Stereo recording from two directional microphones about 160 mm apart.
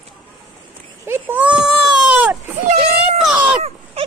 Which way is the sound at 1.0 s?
15° right (ahead or behind).